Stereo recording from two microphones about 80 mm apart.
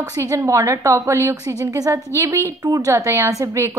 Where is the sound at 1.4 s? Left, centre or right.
Right.